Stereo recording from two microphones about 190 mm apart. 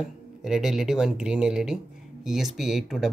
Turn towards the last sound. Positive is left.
turn(degrees=0)  # may be behind; listen again after turning